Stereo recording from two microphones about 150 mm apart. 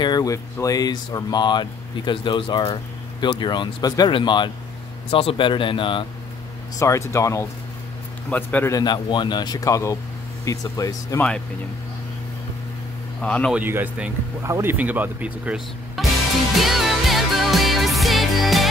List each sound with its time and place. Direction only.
0.0 s speech: 25° left (ahead or behind)
6.8 s a man's voice: 20° left (ahead or behind)
8.7 s speech: 30° left (ahead or behind)
13.2 s speech: 5° left (ahead or behind)
13.5 s speech: 10° right (ahead or behind)
16.6 s music: centre (ahead or behind)